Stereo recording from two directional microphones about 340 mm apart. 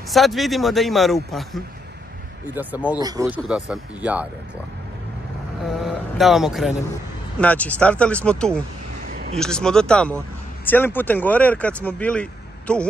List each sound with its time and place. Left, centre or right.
0.1 s speech: centre
5.7 s speech: centre
9.1 s a sound: right
9.4 s speech: centre